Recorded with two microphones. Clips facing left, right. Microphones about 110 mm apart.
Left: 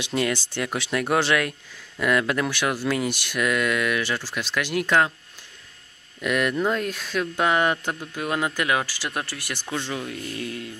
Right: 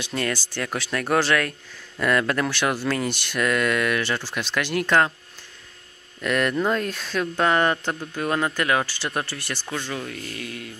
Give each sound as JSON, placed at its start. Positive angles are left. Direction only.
{"t": 0.0, "sound": "speech", "side_deg": 25}
{"t": 6.2, "sound": "speech", "side_deg": 5}
{"t": 9.9, "sound": "speech", "side_deg": 20}